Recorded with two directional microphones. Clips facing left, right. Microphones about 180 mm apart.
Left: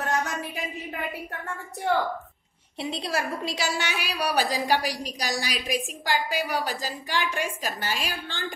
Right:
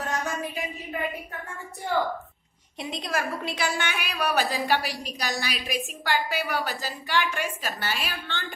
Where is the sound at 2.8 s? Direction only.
30° left (ahead or behind).